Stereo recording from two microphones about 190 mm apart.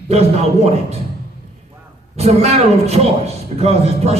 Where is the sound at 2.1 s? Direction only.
35° right (ahead or behind).